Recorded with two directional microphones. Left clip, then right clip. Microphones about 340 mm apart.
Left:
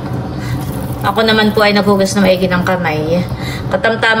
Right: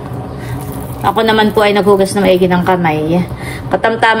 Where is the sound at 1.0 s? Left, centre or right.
Centre.